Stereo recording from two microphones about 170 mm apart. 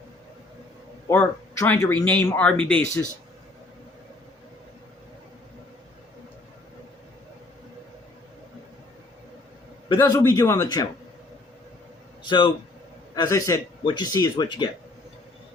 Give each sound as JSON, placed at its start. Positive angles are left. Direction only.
{"t": 1.0, "sound": "speech", "side_deg": 15}
{"t": 10.0, "sound": "speech", "side_deg": 15}
{"t": 12.2, "sound": "a man's voice", "side_deg": 25}